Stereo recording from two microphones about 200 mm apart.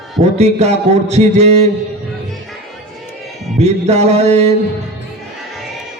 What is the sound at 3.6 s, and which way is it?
Speech, 35° right (ahead or behind).